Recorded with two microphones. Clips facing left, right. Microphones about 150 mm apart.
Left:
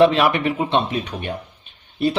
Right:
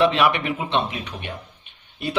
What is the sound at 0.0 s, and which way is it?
A man's voice, 35° left (ahead or behind).